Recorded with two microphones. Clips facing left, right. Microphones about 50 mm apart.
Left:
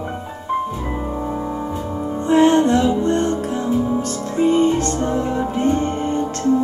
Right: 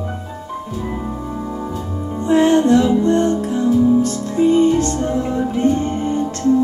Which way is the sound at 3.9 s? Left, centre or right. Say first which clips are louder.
Right 4 dB; left.